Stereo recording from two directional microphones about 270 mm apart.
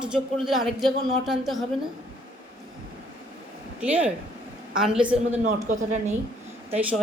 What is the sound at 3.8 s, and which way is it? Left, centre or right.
A woman's voice, centre.